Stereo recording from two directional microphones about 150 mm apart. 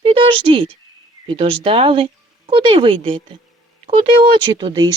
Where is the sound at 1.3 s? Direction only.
35° right (ahead or behind).